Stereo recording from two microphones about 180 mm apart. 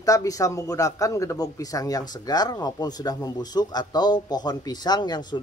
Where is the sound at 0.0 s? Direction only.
20° left (ahead or behind).